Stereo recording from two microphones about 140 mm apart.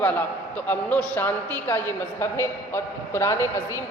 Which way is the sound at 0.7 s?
10° left (ahead or behind).